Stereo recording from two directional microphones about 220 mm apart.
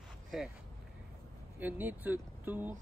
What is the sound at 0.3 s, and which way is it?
Speech, 5° right (ahead or behind).